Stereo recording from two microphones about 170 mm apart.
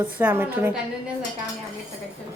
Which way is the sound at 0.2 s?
10° right (ahead or behind).